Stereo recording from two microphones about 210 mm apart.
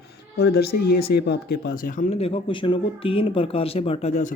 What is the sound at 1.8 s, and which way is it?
Speech, 35° left (ahead or behind).